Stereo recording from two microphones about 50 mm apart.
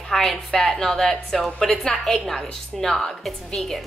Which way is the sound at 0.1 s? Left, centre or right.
Centre.